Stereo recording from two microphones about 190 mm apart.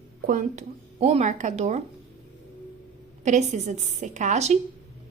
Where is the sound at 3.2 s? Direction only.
40° right (ahead or behind).